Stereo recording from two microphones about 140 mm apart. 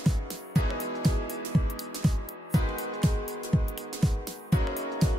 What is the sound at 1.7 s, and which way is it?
Music, centre (ahead or behind).